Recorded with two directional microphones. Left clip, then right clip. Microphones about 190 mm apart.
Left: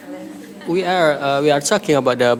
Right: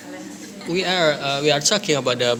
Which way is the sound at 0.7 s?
20° left (ahead or behind).